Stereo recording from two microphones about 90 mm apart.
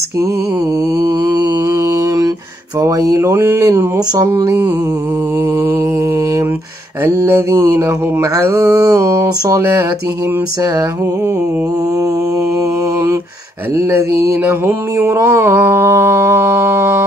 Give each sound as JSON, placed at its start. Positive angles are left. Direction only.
{"t": 1.0, "sound": "mantra", "side_deg": -45}
{"t": 2.8, "sound": "mantra", "side_deg": -40}
{"t": 7.1, "sound": "mantra", "side_deg": -35}
{"t": 13.7, "sound": "mantra", "side_deg": -30}